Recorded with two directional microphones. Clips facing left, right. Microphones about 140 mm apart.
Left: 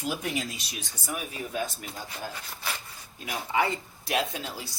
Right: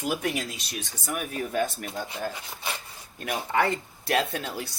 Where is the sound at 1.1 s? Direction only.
55° right (ahead or behind).